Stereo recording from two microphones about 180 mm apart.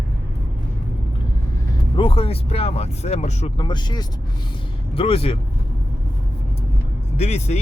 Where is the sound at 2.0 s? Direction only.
30° left (ahead or behind).